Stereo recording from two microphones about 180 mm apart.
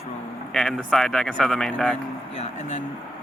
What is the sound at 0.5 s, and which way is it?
Speech, centre (ahead or behind).